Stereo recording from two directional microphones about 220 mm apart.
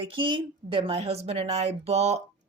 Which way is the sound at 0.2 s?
25° right (ahead or behind).